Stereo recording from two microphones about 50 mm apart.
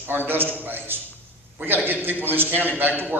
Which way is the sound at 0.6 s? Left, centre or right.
Right.